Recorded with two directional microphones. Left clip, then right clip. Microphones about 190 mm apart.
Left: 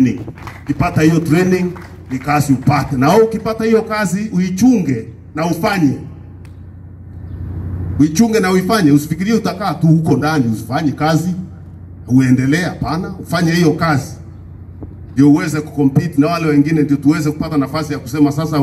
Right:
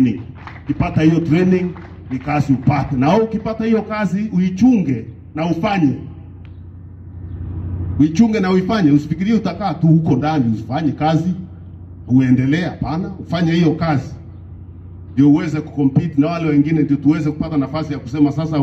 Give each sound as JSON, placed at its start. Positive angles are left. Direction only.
{"t": 0.7, "sound": "a man's voice", "side_deg": -30}
{"t": 8.0, "sound": "a man's voice", "side_deg": -30}
{"t": 15.1, "sound": "a man's voice", "side_deg": -30}